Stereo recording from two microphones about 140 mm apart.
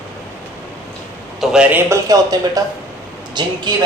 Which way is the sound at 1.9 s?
25° right (ahead or behind).